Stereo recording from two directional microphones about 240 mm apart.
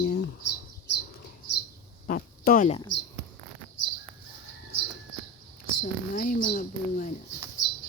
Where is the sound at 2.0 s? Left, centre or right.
Left.